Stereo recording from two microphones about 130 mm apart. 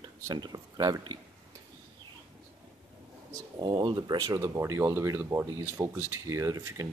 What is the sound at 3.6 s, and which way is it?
Speech, 40° right (ahead or behind).